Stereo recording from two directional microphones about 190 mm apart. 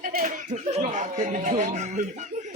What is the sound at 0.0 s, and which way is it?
Chuckle, 45° right (ahead or behind).